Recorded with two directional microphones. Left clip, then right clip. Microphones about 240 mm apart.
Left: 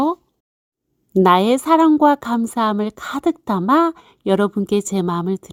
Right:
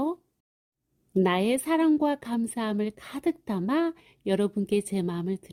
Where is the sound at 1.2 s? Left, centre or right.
Left.